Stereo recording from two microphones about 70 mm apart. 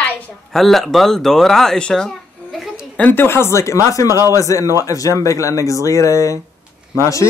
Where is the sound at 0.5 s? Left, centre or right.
Centre.